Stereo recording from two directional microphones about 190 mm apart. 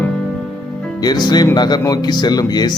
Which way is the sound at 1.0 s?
20° left (ahead or behind).